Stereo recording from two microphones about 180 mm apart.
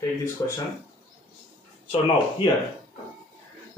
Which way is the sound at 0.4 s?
15° left (ahead or behind).